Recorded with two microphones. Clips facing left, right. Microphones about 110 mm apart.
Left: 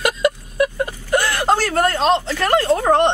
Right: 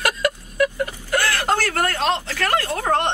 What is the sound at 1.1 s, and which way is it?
Speech, 20° left (ahead or behind).